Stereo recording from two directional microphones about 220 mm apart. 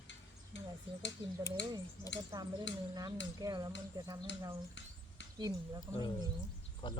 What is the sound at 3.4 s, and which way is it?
Speech, 15° right (ahead or behind).